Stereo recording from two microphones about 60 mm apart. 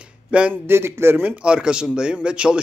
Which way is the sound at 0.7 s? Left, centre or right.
Right.